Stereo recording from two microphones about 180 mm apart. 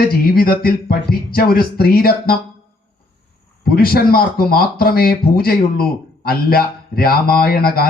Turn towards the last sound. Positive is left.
turn(degrees=55)  # may be behind; listen again after turning